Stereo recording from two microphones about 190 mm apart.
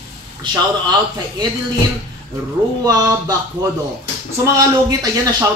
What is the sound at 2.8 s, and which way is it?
Speech, 20° right (ahead or behind).